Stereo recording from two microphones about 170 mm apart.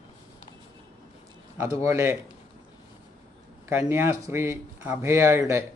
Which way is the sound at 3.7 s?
15° right (ahead or behind).